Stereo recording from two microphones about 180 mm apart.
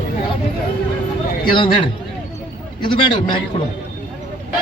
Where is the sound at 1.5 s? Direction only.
30° left (ahead or behind).